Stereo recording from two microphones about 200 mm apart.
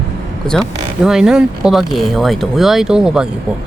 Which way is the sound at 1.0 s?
5° right (ahead or behind).